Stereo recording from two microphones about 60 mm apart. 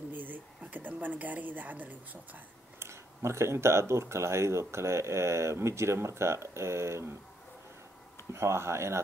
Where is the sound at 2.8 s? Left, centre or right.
Right.